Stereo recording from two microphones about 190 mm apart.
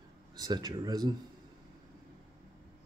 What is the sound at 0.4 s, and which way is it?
Speech, 20° right (ahead or behind).